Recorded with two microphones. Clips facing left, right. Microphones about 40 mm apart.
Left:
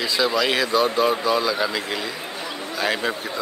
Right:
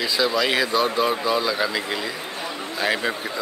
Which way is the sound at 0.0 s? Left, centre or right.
Centre.